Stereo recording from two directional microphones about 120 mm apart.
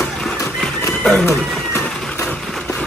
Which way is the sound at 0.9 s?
5° left (ahead or behind).